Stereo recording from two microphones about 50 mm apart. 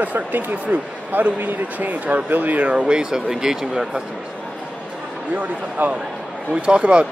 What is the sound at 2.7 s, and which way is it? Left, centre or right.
Speech, centre.